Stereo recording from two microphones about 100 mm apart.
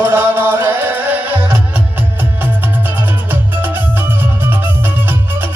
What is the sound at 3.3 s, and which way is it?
Music, 20° right (ahead or behind).